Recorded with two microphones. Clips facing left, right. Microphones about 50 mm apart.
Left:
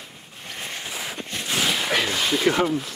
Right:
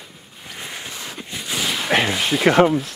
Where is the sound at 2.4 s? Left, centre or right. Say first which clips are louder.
Right 8 dB; right.